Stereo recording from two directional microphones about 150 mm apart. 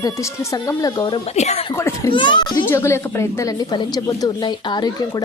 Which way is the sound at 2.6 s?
15° left (ahead or behind).